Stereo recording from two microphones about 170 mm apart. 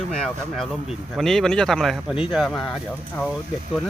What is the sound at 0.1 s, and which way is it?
Speech, 5° left (ahead or behind).